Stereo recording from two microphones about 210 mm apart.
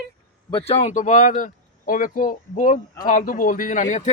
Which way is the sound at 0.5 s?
30° left (ahead or behind).